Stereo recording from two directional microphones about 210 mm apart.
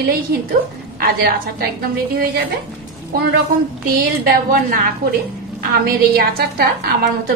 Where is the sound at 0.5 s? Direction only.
45° right (ahead or behind).